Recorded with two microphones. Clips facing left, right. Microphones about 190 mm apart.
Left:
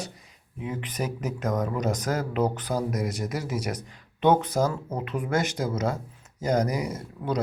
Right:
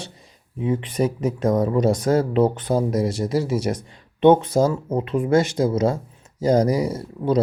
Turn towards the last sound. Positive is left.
turn(degrees=-30)  # may be behind; listen again after turning